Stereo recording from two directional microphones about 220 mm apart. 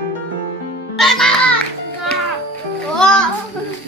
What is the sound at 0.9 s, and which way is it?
Music, centre (ahead or behind).